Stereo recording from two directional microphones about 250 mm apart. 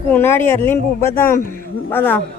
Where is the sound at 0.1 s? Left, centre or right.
Centre.